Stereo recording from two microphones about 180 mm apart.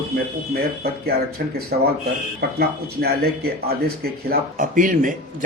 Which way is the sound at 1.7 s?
55° right (ahead or behind).